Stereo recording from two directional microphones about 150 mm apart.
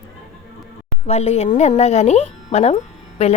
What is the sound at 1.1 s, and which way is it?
A woman's voice, 45° left (ahead or behind).